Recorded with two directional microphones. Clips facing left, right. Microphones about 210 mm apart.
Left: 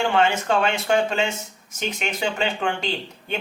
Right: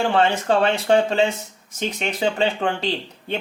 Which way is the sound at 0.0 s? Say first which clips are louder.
Right 1 dB; 35° right (ahead or behind).